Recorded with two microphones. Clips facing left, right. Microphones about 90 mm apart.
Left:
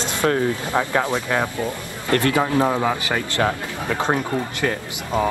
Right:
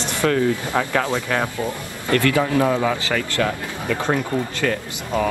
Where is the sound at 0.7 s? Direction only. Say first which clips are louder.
Even; 15° left (ahead or behind).